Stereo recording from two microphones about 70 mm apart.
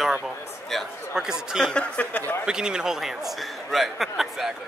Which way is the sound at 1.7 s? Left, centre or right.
Centre.